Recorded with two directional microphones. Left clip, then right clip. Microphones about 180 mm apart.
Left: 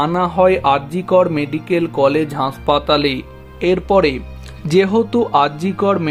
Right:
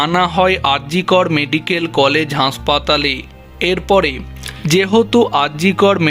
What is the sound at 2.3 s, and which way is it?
Speech, 30° right (ahead or behind).